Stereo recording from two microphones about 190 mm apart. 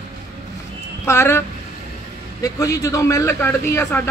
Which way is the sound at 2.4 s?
20° left (ahead or behind).